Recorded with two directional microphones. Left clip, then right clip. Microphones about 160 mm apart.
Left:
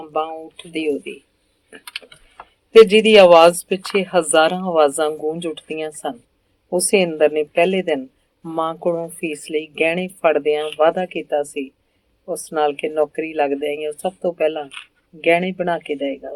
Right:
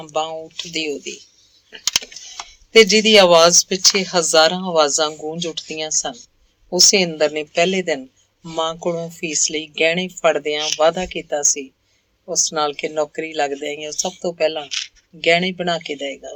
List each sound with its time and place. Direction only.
0.0 s speech: 50° right (ahead or behind)
2.7 s speech: 40° right (ahead or behind)
6.9 s speech: 45° right (ahead or behind)